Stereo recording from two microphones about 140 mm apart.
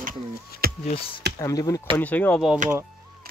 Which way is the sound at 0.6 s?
90° right.